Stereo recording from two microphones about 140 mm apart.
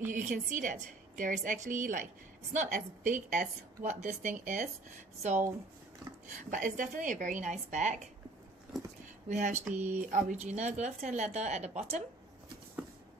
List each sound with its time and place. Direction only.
0.1 s a woman's voice: 70° right (ahead or behind)
6.3 s speech: 70° right (ahead or behind)
8.7 s speech: centre (ahead or behind)
9.3 s speech: 60° right (ahead or behind)
9.9 s a woman's voice: 70° right (ahead or behind)
10.4 s speech: 55° right (ahead or behind)